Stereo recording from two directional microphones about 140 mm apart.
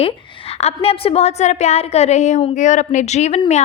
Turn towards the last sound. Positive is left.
turn(degrees=50)  # may be behind; listen again after turning